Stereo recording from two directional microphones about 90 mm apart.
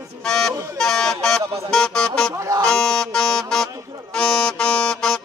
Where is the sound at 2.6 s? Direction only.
10° left (ahead or behind).